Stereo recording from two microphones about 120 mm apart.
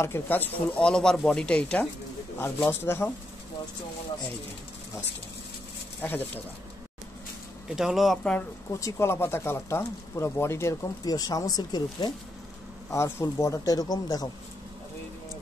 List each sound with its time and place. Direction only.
0.0 s speech: 20° left (ahead or behind)
6.0 s speech: 15° left (ahead or behind)
7.6 s speech: 5° right (ahead or behind)
8.7 s speech: 25° left (ahead or behind)
12.9 s speech: 25° left (ahead or behind)